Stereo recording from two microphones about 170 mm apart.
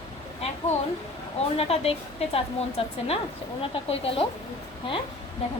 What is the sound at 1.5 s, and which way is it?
Speech, 35° left (ahead or behind).